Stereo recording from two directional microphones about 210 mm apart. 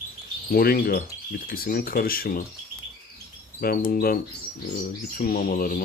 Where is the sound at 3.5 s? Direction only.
45° left (ahead or behind).